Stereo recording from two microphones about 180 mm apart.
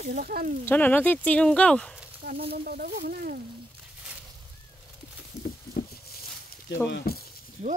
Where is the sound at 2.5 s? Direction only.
55° right (ahead or behind).